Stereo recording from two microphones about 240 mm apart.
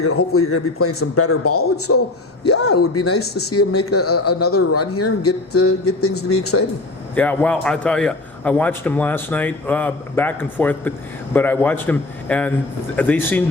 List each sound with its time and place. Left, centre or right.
0.0 s a man's voice: left
7.2 s a man's voice: centre